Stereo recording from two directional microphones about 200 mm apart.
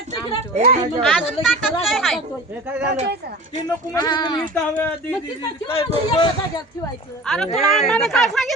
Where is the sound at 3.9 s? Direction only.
20° left (ahead or behind).